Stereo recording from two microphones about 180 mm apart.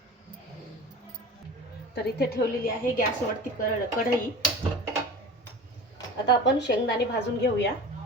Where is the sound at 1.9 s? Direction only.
60° left (ahead or behind).